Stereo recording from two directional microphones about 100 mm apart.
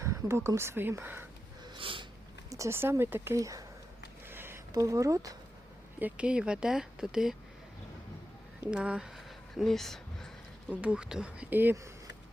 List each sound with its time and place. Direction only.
0.0 s speech: 30° right (ahead or behind)
1.6 s snort: 55° right (ahead or behind)
2.5 s speech: 30° right (ahead or behind)
4.3 s a sound: 20° right (ahead or behind)
4.7 s speech: 35° right (ahead or behind)
6.0 s speech: 15° right (ahead or behind)
8.6 s a sound: 10° right (ahead or behind)
10.7 s speech: 15° right (ahead or behind)